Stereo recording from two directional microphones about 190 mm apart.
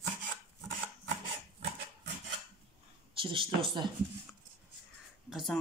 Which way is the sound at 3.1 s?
25° right (ahead or behind).